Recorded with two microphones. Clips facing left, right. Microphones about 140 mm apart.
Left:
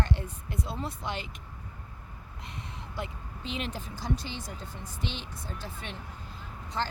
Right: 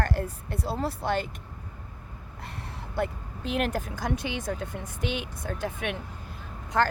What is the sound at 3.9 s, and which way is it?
Speech, 50° right (ahead or behind).